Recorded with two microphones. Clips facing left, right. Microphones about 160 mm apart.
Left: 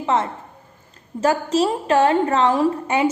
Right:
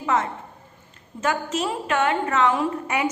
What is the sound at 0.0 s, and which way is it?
A woman's voice, 30° left (ahead or behind).